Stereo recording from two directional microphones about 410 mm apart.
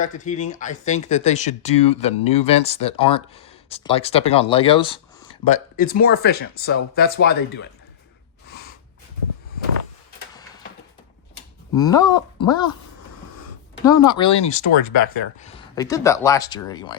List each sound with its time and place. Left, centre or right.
0.0 s speech: centre
11.7 s speech: centre
13.8 s speech: centre